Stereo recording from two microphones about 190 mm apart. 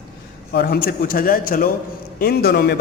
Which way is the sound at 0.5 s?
55° left (ahead or behind).